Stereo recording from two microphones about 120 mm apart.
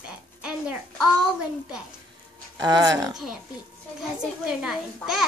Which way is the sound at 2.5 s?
35° right (ahead or behind).